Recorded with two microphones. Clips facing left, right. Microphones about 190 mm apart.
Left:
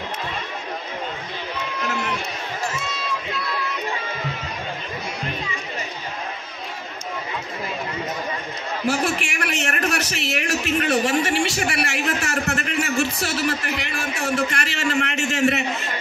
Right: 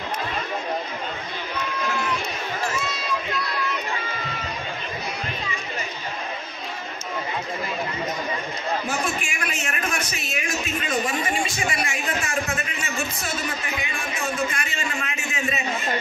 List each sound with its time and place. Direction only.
8.8 s a man's voice: 75° left (ahead or behind)